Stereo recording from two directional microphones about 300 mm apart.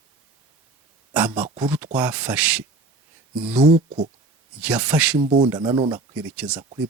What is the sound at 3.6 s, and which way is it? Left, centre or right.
Speech, centre.